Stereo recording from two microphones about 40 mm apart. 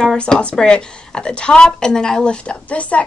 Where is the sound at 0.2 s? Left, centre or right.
Left.